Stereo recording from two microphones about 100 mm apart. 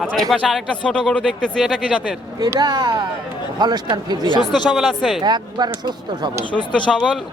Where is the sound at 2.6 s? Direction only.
45° right (ahead or behind).